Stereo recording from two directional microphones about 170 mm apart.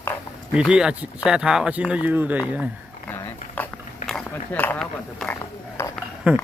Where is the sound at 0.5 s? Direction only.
5° right (ahead or behind).